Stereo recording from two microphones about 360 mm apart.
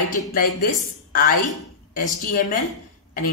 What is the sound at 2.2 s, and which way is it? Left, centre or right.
Speech, left.